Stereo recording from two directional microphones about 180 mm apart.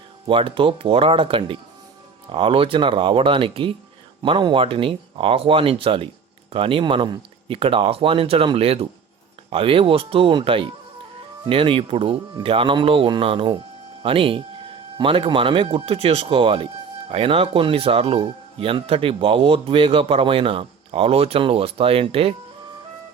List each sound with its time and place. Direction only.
0.3 s speech: 30° right (ahead or behind)